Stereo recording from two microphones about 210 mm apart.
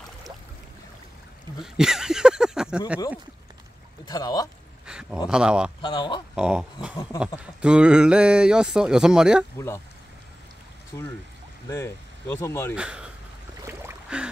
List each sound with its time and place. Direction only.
1.6 s speech: centre (ahead or behind)
4.0 s speech: 20° left (ahead or behind)
4.8 s a sound: 5° right (ahead or behind)
5.3 s speech: 5° right (ahead or behind)
5.8 s speech: 20° left (ahead or behind)
6.3 s speech: 5° right (ahead or behind)
10.9 s speech: 15° left (ahead or behind)
12.7 s speech: 5° right (ahead or behind)
13.6 s a sound: 10° right (ahead or behind)